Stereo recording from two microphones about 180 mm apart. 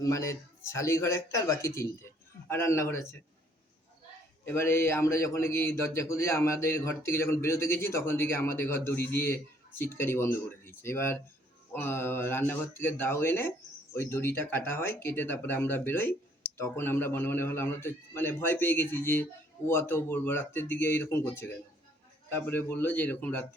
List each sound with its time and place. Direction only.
0.0 s a man's voice: 15° left (ahead or behind)
4.4 s a man's voice: 15° left (ahead or behind)